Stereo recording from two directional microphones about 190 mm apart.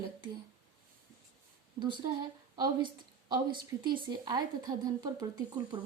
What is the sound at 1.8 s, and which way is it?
A woman's voice, 25° right (ahead or behind).